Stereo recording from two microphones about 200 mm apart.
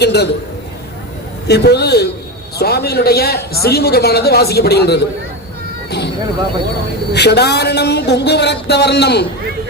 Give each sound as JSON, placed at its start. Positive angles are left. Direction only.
{"t": 0.0, "sound": "speech", "side_deg": 55}
{"t": 1.5, "sound": "a man's voice", "side_deg": 55}
{"t": 7.1, "sound": "speech", "side_deg": 55}